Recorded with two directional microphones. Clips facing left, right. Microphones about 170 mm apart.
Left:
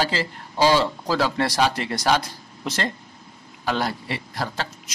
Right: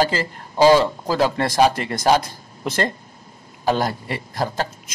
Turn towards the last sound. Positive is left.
turn(degrees=-45)  # may be behind; listen again after turning